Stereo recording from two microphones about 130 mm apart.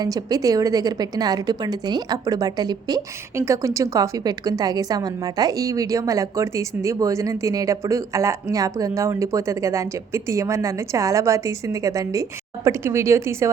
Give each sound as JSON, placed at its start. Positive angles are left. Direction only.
{"t": 0.0, "sound": "a woman's voice", "side_deg": -30}